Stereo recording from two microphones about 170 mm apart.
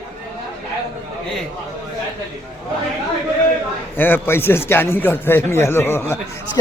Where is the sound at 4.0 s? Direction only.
10° left (ahead or behind).